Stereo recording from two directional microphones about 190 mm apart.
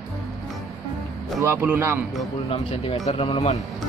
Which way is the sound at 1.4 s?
10° right (ahead or behind).